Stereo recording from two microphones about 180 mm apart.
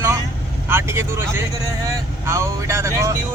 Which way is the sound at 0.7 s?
15° right (ahead or behind).